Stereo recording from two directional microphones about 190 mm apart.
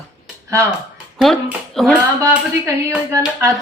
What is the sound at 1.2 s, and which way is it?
A woman's voice, centre (ahead or behind).